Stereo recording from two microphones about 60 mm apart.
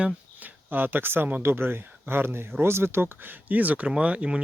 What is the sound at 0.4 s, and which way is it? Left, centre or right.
Speech, right.